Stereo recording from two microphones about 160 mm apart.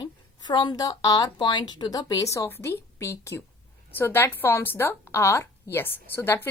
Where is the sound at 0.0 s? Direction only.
30° left (ahead or behind).